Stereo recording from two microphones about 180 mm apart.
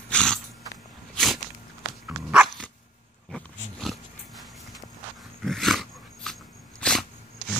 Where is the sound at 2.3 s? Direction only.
Centre (ahead or behind).